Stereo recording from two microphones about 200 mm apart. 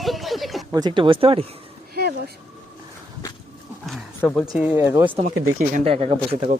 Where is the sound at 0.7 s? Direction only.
20° right (ahead or behind).